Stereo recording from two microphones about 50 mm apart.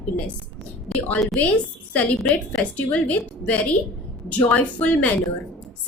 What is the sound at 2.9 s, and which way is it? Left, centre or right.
Speech, left.